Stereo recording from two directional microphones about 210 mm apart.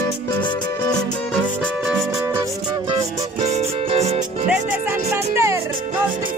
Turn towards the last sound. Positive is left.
turn(degrees=-15)  # may be behind; listen again after turning